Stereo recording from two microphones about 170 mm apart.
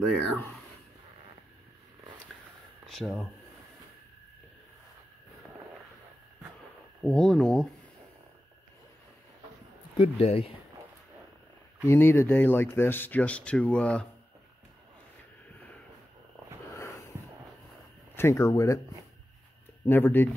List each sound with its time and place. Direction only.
2.9 s speech: centre (ahead or behind)
7.0 s speech: 5° left (ahead or behind)
9.9 s speech: 35° left (ahead or behind)
11.9 s speech: 15° left (ahead or behind)
18.1 s speech: 15° left (ahead or behind)
19.9 s speech: 10° left (ahead or behind)